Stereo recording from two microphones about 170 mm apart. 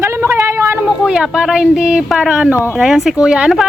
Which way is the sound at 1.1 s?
5° right (ahead or behind).